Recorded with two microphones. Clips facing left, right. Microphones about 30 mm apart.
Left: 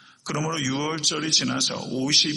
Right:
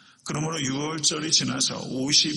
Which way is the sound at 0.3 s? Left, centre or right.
Centre.